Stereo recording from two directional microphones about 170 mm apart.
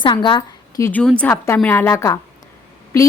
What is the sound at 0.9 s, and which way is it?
A woman's voice, 10° left (ahead or behind).